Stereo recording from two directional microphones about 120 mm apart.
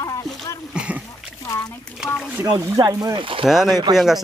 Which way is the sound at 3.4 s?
5° right (ahead or behind).